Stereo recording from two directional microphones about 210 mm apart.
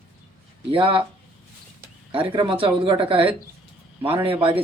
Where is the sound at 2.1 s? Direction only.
25° right (ahead or behind).